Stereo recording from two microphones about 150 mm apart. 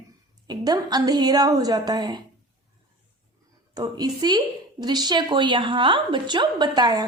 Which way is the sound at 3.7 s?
25° right (ahead or behind).